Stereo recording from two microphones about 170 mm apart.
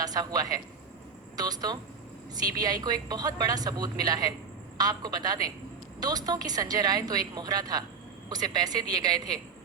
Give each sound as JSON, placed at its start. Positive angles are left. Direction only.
{"t": 0.0, "sound": "a woman's voice", "side_deg": -20}